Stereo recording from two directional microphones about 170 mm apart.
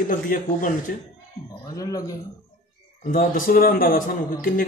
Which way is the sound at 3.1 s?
55° left (ahead or behind).